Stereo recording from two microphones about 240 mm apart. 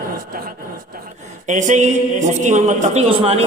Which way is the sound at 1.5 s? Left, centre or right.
Right.